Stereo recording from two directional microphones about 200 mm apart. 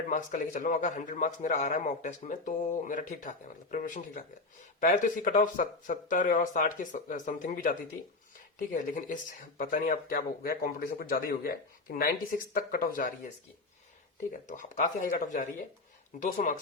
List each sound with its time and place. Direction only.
0.1 s a man's voice: 40° left (ahead or behind)
14.3 s a man's voice: 40° left (ahead or behind)